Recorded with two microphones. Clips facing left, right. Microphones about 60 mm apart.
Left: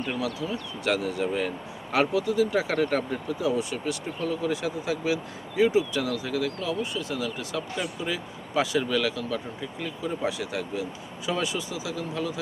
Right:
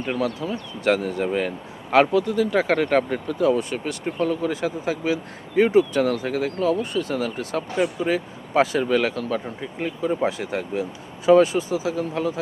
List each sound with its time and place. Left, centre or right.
0.0 s speech: right